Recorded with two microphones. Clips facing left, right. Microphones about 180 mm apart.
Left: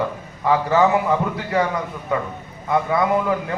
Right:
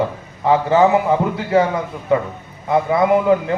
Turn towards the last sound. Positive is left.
turn(degrees=-25)  # may be behind; listen again after turning